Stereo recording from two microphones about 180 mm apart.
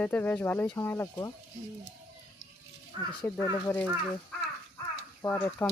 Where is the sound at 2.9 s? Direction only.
25° right (ahead or behind).